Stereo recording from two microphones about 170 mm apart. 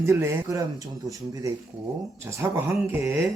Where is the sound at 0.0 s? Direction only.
15° right (ahead or behind).